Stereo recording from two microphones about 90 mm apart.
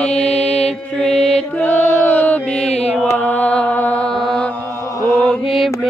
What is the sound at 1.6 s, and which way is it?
Chant, 20° left (ahead or behind).